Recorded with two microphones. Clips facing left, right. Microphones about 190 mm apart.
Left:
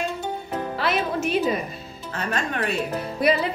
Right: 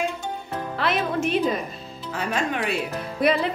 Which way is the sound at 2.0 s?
10° right (ahead or behind).